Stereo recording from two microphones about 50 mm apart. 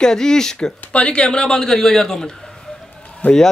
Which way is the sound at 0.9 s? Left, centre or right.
Left.